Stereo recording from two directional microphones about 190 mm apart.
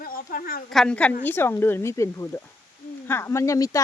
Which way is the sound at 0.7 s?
5° left (ahead or behind).